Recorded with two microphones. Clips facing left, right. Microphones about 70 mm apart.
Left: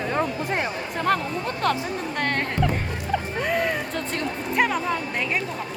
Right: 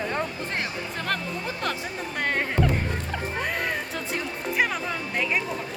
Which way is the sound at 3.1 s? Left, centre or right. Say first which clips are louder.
Left 7 dB; centre.